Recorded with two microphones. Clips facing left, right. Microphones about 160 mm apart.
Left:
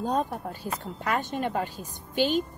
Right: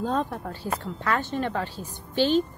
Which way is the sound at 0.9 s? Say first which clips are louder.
Right 1 dB; 15° left (ahead or behind).